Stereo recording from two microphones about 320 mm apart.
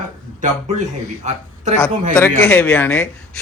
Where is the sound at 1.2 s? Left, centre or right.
Right.